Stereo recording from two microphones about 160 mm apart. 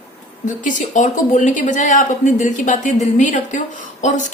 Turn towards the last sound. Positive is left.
turn(degrees=50)  # may be behind; listen again after turning